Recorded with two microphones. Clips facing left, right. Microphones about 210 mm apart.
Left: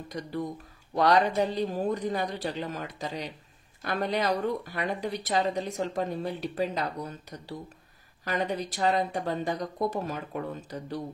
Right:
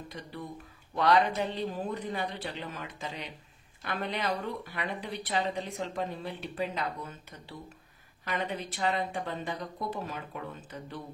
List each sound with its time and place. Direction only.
0.1 s speech: 45° left (ahead or behind)